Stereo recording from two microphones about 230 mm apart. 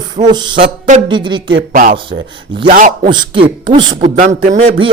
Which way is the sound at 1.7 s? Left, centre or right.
Right.